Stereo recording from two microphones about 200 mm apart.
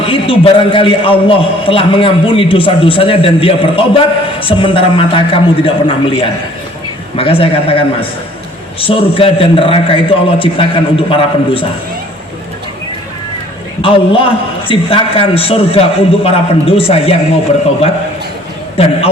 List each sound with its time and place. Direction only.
0.0 s a man's voice: 25° left (ahead or behind)
13.8 s a man's voice: 25° left (ahead or behind)